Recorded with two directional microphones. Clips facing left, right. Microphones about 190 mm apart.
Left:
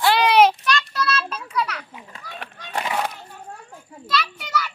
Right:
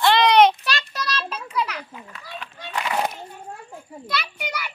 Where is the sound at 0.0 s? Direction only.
10° left (ahead or behind).